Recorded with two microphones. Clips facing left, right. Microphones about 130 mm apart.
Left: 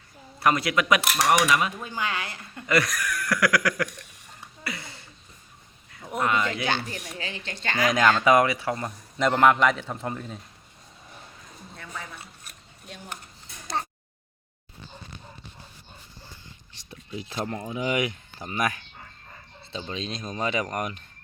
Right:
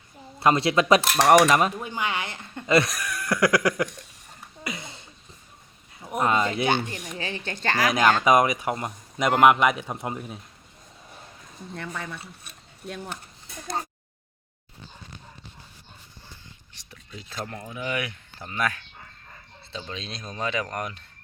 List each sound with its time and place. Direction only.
0.3 s speech: 25° right (ahead or behind)
1.1 s cutlery: 45° right (ahead or behind)
1.8 s speech: 20° right (ahead or behind)
4.6 s a sound: 20° right (ahead or behind)
6.1 s speech: 30° right (ahead or behind)
7.9 s a man's voice: 10° right (ahead or behind)
16.7 s speech: 20° left (ahead or behind)